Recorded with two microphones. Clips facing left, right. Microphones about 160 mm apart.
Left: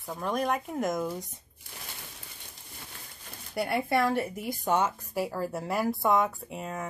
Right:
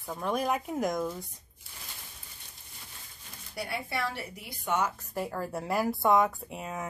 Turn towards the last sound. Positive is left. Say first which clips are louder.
# left 1 dB
turn(degrees=0)  # may be behind; listen again after turning